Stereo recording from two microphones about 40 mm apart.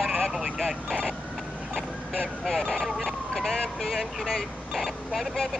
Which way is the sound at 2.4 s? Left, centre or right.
Centre.